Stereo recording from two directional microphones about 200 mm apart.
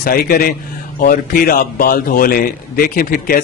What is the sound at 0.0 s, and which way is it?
A man's voice, 45° left (ahead or behind).